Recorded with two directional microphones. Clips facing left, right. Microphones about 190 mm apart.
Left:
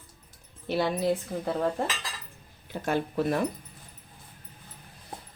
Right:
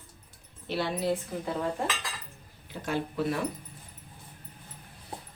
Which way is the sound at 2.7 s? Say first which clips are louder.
Left 3 dB; 50° left (ahead or behind).